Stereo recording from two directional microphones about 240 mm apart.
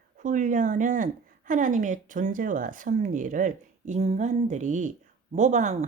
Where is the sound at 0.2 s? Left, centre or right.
Right.